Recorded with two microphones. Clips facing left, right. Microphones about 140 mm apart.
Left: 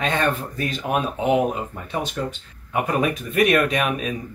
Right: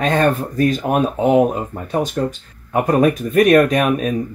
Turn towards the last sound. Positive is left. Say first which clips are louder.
# right 6 dB
turn(degrees=-45)  # may be behind; listen again after turning